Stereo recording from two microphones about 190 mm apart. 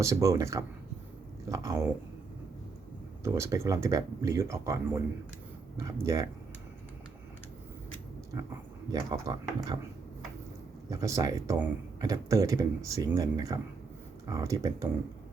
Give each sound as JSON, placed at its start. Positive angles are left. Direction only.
{"t": 0.0, "sound": "speech", "side_deg": -15}
{"t": 3.2, "sound": "speech", "side_deg": -15}
{"t": 9.0, "sound": "speech", "side_deg": -20}
{"t": 10.8, "sound": "speech", "side_deg": -20}